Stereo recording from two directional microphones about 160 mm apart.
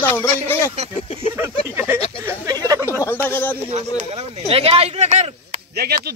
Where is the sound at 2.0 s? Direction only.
40° left (ahead or behind).